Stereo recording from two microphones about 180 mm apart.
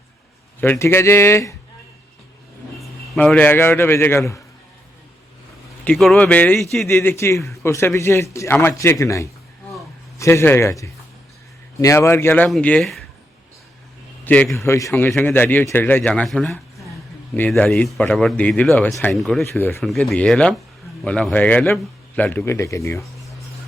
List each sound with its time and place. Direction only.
0.6 s speech: 10° left (ahead or behind)
2.7 s a man's voice: 5° left (ahead or behind)
5.8 s speech: 5° left (ahead or behind)
6.8 s speech: 15° left (ahead or behind)
14.3 s speech: 10° left (ahead or behind)
19.5 s speech: 15° left (ahead or behind)
19.8 s speech: centre (ahead or behind); by 23.0 s 15° left (ahead or behind)